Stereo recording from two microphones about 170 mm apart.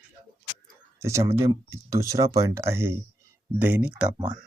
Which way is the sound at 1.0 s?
15° right (ahead or behind).